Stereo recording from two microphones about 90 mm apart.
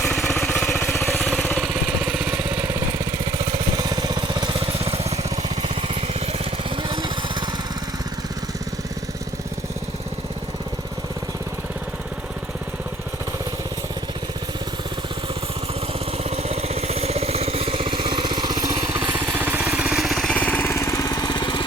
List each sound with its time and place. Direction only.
0.1 s a sound: 5° left (ahead or behind)
0.6 s a sound: 25° left (ahead or behind)
1.0 s a sound: 15° left (ahead or behind)
1.4 s vehicle: 15° left (ahead or behind)
2.0 s vehicle: 10° right (ahead or behind)
2.5 s lawn mower: 30° right (ahead or behind)
3.3 s a sound: 50° right (ahead or behind); by 4.9 s 90° right
5.6 s lawn mower: 90° right; by 7.4 s 60° right (ahead or behind)
17.5 s vehicle: 90° right; by 18.8 s 55° right (ahead or behind)
19.1 s vehicle: 30° right (ahead or behind)
20.0 s vehicle: centre (ahead or behind)
20.3 s lawn mower: 15° left (ahead or behind)
20.7 s lawn mower: 35° left (ahead or behind); by 21.6 s 55° left (ahead or behind)